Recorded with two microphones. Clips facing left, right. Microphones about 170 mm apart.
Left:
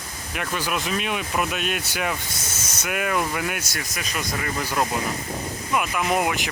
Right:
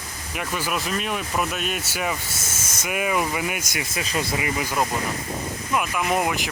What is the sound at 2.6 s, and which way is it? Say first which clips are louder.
Speech: right 1 dB; 10° right (ahead or behind).